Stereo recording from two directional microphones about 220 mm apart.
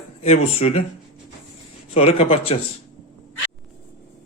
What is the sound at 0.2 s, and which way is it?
Speech, 30° left (ahead or behind).